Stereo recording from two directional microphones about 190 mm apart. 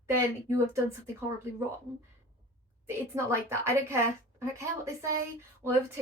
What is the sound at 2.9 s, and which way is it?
A woman's voice, 15° right (ahead or behind).